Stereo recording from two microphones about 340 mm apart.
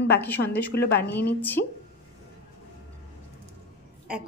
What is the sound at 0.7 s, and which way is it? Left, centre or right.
A woman's voice, left.